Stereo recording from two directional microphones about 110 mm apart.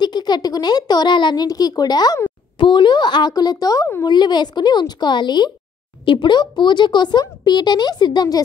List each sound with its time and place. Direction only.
0.0 s speech: 40° left (ahead or behind)